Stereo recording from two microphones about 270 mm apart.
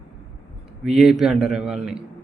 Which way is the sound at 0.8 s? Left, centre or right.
Centre.